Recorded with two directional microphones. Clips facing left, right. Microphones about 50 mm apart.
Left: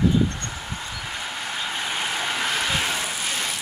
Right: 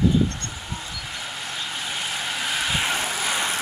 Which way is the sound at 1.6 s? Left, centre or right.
Centre.